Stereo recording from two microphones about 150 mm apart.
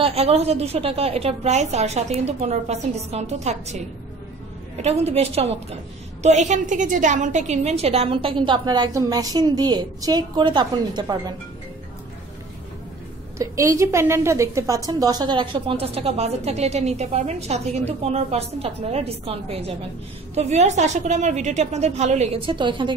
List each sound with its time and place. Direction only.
0.0 s a woman's voice: 40° right (ahead or behind)
4.8 s a woman's voice: 40° right (ahead or behind)
13.4 s a woman's voice: 20° right (ahead or behind); by 22.4 s 50° right (ahead or behind)
22.5 s a woman's voice: 35° right (ahead or behind)